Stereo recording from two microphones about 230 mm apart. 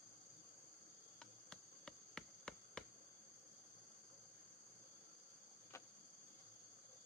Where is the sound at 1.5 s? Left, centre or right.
Centre.